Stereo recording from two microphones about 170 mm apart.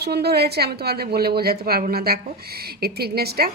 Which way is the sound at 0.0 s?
70° right (ahead or behind).